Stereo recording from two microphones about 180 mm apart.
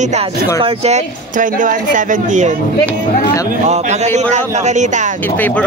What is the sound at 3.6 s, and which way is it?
A man's voice, 35° right (ahead or behind).